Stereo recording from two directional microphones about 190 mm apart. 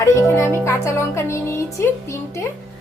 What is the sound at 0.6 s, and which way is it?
A woman's voice, 15° left (ahead or behind).